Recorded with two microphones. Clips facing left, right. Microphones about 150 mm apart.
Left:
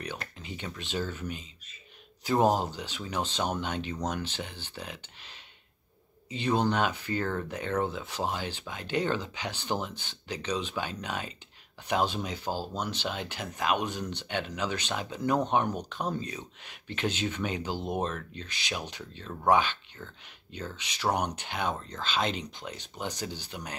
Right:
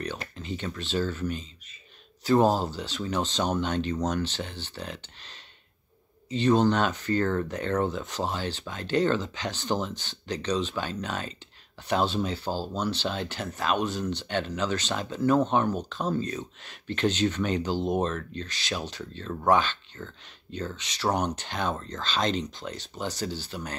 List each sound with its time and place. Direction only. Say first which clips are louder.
0.4 s speech: right 6 dB; 10° left (ahead or behind)
6.3 s speech: right 5 dB; 10° left (ahead or behind)